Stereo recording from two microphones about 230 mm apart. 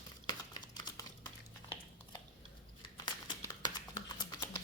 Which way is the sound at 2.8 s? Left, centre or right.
Centre.